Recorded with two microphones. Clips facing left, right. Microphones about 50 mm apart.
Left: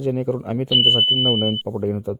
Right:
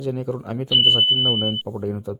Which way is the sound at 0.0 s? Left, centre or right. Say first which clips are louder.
Left 4 dB; left.